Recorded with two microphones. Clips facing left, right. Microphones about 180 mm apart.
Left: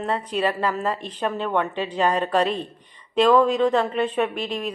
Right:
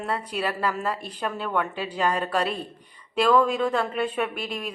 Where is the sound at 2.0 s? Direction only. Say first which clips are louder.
Left 4 dB; 35° left (ahead or behind).